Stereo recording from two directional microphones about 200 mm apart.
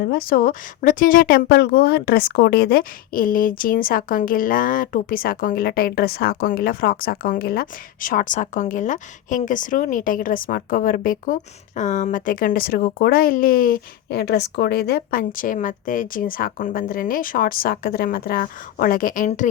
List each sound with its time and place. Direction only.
0.0 s speech: 50° left (ahead or behind)